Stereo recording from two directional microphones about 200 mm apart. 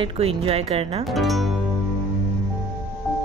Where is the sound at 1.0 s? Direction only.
Centre (ahead or behind).